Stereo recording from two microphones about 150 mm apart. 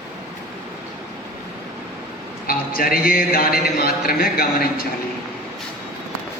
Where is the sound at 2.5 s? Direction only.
75° left (ahead or behind).